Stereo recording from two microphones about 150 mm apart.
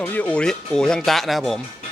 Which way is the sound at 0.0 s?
10° left (ahead or behind).